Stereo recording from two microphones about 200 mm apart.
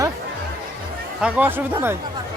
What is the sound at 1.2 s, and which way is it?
Speech, 10° right (ahead or behind).